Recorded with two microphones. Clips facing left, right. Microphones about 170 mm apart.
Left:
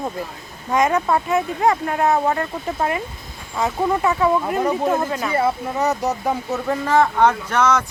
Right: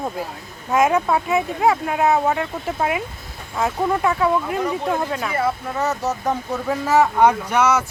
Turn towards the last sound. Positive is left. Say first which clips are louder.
# even
turn(degrees=-10)  # may be behind; listen again after turning